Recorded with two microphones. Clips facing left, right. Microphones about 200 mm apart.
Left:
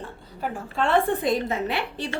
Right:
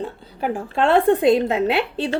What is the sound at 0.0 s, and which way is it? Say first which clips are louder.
A woman's voice: right 7 dB; 90° right.